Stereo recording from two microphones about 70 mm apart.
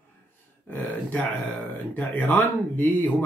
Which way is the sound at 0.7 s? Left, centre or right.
Left.